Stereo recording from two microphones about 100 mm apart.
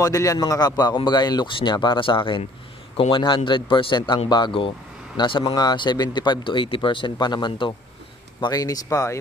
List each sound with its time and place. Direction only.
0.0 s a man's voice: 35° left (ahead or behind); by 5.5 s 55° left (ahead or behind)
5.5 s a man's voice: 45° left (ahead or behind)
8.5 s speech: 35° left (ahead or behind)